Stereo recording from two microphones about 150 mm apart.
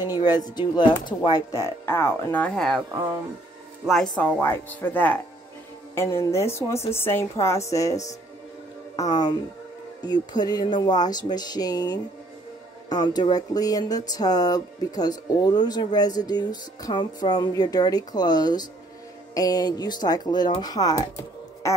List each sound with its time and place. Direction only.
0.1 s speech: 25° left (ahead or behind); by 2.8 s 5° left (ahead or behind)
3.8 s speech: centre (ahead or behind)
4.2 s speech: 10° left (ahead or behind)